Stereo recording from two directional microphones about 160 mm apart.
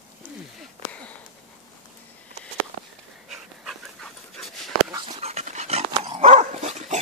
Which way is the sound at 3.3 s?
Centre (ahead or behind).